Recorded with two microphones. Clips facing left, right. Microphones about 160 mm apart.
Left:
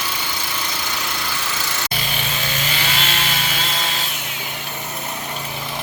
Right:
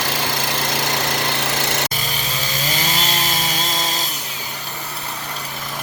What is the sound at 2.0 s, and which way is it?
Chainsaw, 40° right (ahead or behind).